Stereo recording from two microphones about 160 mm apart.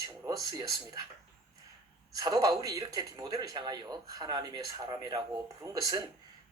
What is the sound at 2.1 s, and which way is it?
A man's voice, 25° right (ahead or behind).